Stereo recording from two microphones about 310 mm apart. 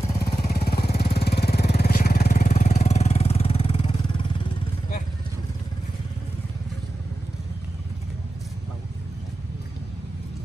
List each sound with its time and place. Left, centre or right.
0.0 s vehicle: left